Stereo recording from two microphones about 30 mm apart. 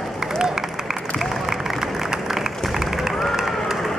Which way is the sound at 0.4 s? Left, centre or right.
Centre.